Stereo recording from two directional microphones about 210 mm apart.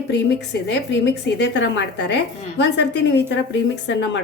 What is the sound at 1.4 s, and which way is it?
A woman's voice, 55° left (ahead or behind).